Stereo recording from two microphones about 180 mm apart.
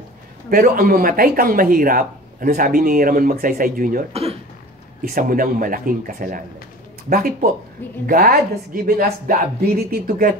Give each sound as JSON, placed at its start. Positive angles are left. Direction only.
{"t": 0.5, "sound": "speech", "side_deg": -50}
{"t": 4.1, "sound": "speech", "side_deg": -35}
{"t": 5.0, "sound": "speech", "side_deg": -50}